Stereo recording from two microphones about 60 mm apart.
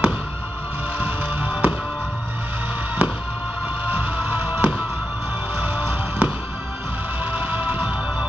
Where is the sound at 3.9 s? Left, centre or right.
Right.